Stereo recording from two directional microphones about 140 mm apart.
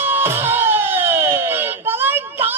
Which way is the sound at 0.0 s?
15° right (ahead or behind).